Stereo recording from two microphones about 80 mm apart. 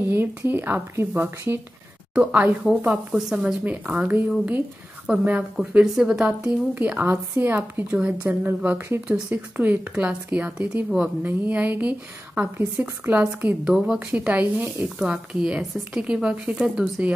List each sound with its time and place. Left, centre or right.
0.0 s speech: right
2.1 s speech: centre
3.2 s a woman's voice: centre
3.6 s speech: centre
6.7 s speech: right